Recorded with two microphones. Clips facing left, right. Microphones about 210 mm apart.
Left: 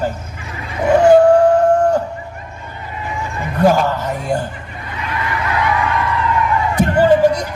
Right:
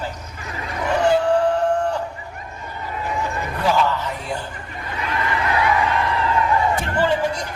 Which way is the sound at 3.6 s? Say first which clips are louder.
Left 6 dB; 50° left (ahead or behind).